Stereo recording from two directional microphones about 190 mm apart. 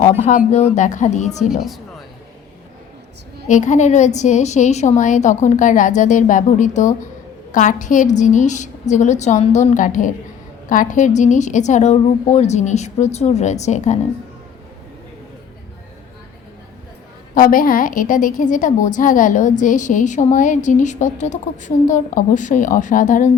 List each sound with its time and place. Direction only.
0.0 s a woman's voice: 40° left (ahead or behind)
1.5 s speech: centre (ahead or behind)
3.5 s a woman's voice: 40° left (ahead or behind)
17.3 s a woman's voice: 45° left (ahead or behind)